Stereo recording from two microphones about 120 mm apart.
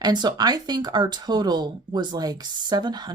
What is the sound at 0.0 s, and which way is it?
Speech, 35° right (ahead or behind).